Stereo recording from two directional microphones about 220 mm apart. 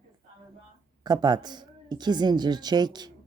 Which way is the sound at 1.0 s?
20° right (ahead or behind).